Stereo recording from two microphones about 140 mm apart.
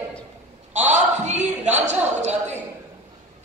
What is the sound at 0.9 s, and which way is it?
A man's voice, 55° right (ahead or behind).